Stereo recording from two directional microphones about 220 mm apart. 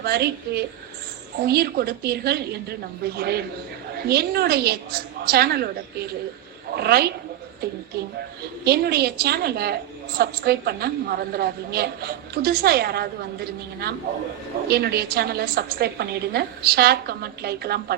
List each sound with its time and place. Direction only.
0.0 s a woman's voice: 45° right (ahead or behind)